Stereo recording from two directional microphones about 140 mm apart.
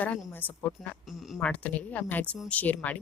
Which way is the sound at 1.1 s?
Centre (ahead or behind).